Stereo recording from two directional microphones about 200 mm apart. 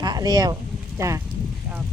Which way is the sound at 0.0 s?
20° right (ahead or behind).